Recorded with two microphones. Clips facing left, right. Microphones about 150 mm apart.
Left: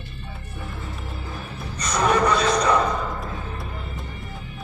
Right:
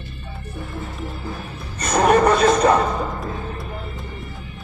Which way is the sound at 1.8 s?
55° right (ahead or behind).